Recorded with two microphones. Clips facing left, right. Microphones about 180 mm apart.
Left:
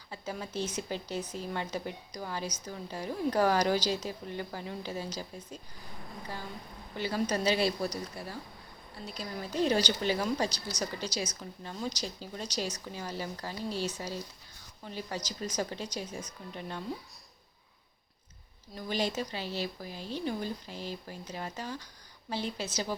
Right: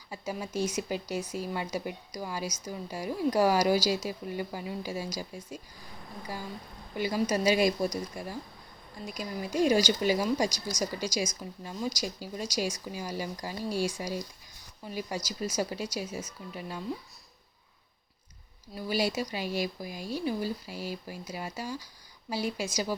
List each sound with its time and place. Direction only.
0.1 s speech: 10° right (ahead or behind)
6.9 s speech: 10° right (ahead or behind)
18.7 s speech: 10° right (ahead or behind)